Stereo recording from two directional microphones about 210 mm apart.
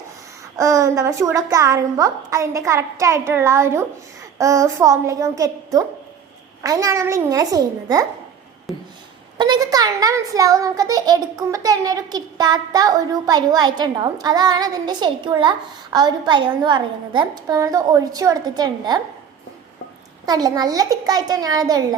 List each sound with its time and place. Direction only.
0.5 s a woman's voice: 15° right (ahead or behind)
6.6 s a woman's voice: 15° right (ahead or behind)
9.4 s a child's voice: 20° right (ahead or behind)
20.2 s a woman's voice: 20° right (ahead or behind)